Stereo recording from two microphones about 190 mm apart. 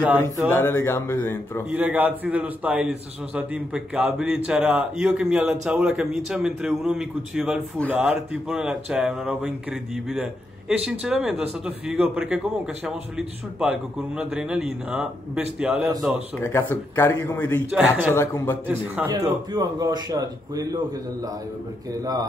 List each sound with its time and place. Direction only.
0.5 s speech: 10° left (ahead or behind)
1.7 s a man's voice: 5° right (ahead or behind)
16.3 s speech: 10° left (ahead or behind)
17.6 s speech: 5° right (ahead or behind)
18.1 s speech: 15° left (ahead or behind)
18.7 s a man's voice: 10° right (ahead or behind)
22.0 s a man's voice: 20° right (ahead or behind)